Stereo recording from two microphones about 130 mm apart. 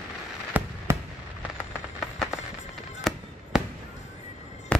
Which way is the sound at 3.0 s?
Centre (ahead or behind).